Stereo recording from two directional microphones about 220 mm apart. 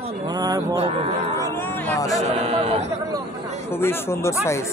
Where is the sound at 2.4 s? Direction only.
30° right (ahead or behind).